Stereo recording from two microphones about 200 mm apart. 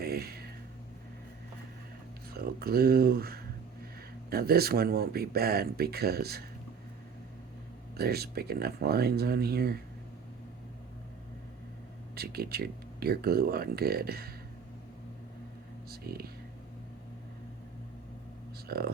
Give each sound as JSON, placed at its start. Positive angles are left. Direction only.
{"t": 0.0, "sound": "a sound", "side_deg": -50}
{"t": 2.3, "sound": "speech", "side_deg": -50}
{"t": 7.9, "sound": "speech", "side_deg": -50}
{"t": 12.1, "sound": "speech", "side_deg": -50}
{"t": 15.9, "sound": "a sound", "side_deg": -50}
{"t": 18.7, "sound": "speech", "side_deg": -50}